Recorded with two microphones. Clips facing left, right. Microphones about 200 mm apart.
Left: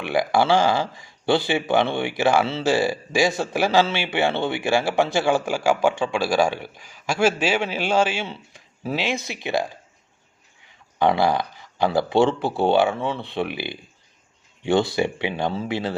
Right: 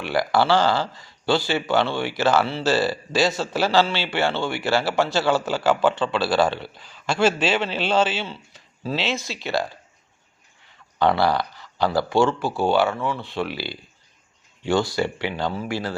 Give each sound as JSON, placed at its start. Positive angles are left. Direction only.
{"t": 0.0, "sound": "speech", "side_deg": 20}
{"t": 10.9, "sound": "speech", "side_deg": 15}